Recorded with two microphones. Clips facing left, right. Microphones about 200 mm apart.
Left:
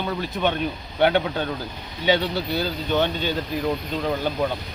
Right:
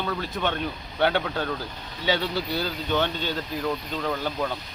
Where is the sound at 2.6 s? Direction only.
10° left (ahead or behind).